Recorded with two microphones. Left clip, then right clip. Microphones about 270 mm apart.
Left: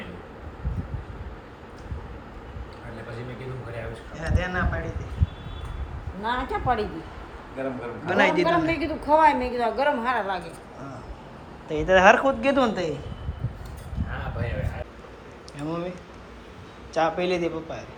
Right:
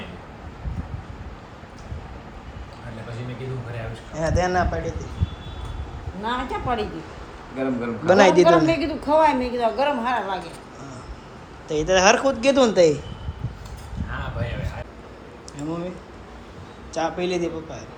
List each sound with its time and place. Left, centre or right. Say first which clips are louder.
4.1 s speech: right 8 dB; centre
6.2 s a woman's voice: even; centre
8.0 s speech: right 7 dB; centre
8.4 s a woman's voice: right 6 dB; centre
11.7 s speech: even; centre
15.5 s speech: right 1 dB; centre
16.9 s speech: left 1 dB; centre